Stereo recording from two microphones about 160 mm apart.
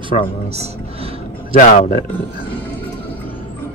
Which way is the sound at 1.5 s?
50° left (ahead or behind).